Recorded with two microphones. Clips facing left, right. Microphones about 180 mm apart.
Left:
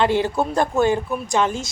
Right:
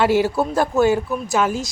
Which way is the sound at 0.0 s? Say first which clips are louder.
Right 2 dB; 5° right (ahead or behind).